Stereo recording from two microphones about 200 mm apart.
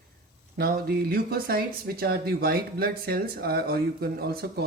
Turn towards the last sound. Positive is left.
turn(degrees=-55)  # may be behind; listen again after turning